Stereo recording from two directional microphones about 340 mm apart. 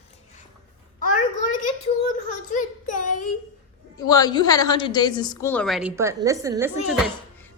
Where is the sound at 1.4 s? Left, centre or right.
Left.